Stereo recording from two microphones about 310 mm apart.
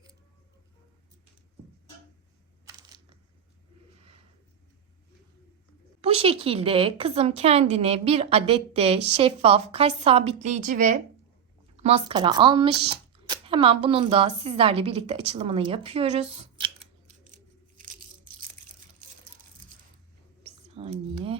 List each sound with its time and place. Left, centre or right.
2.6 s crushing: centre
6.0 s a woman's voice: centre
20.7 s a sound: centre